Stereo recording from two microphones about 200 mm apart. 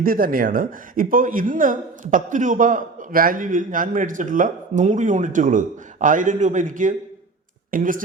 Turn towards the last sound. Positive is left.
turn(degrees=-45)  # may be behind; listen again after turning